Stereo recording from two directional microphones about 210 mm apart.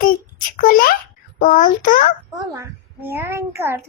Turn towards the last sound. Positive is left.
turn(degrees=-15)  # may be behind; listen again after turning